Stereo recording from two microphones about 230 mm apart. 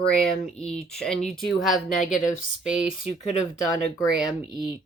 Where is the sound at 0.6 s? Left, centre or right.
Centre.